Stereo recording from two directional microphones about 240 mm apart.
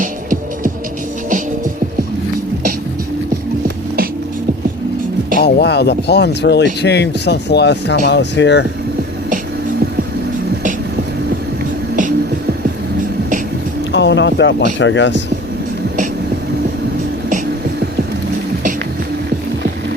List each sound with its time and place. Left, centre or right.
0.0 s music: right
5.4 s speech: left
13.9 s speech: left